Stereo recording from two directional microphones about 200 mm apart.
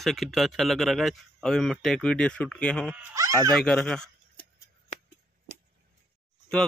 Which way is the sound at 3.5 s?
5° left (ahead or behind).